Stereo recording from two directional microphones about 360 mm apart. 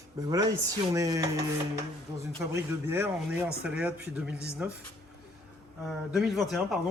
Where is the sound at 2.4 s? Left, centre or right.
Centre.